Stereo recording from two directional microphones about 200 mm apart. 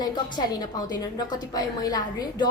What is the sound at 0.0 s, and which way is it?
A woman's voice, 20° left (ahead or behind).